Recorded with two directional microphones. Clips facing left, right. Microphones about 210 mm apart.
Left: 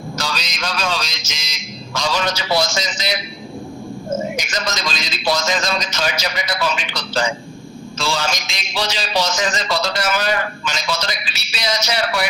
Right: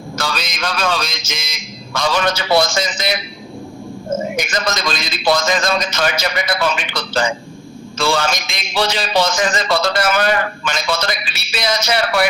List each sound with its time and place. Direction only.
0.2 s a man's voice: 55° right (ahead or behind)
4.4 s a man's voice: 55° right (ahead or behind)